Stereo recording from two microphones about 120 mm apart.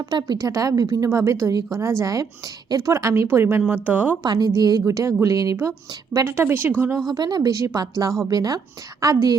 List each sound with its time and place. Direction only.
0.0 s a woman's voice: 35° right (ahead or behind); by 4.2 s 15° right (ahead or behind)
4.2 s a woman's voice: 35° right (ahead or behind); by 6.7 s 15° right (ahead or behind)
7.1 s a woman's voice: 35° right (ahead or behind)